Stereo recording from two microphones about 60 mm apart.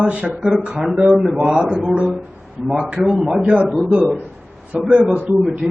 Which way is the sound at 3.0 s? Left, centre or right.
Centre.